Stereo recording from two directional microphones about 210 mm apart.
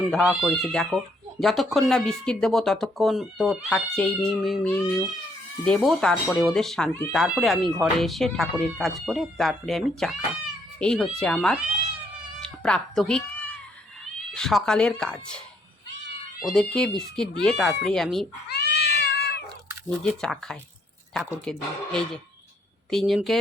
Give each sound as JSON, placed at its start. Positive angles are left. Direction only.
{"t": 0.1, "sound": "speech", "side_deg": 0}
{"t": 12.4, "sound": "cat", "side_deg": 5}
{"t": 14.3, "sound": "speech", "side_deg": 5}
{"t": 16.4, "sound": "speech", "side_deg": 0}
{"t": 18.4, "sound": "cat", "side_deg": 50}
{"t": 20.1, "sound": "speech", "side_deg": 5}